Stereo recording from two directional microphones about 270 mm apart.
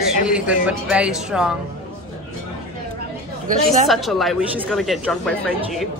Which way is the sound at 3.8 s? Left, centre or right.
Centre.